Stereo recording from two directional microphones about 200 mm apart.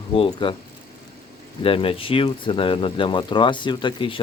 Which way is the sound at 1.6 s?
25° left (ahead or behind).